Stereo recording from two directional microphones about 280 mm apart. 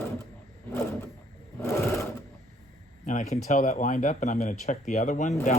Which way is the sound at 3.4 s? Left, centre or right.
Left.